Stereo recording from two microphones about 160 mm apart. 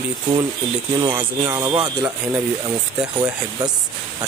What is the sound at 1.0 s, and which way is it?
Speech, 25° right (ahead or behind).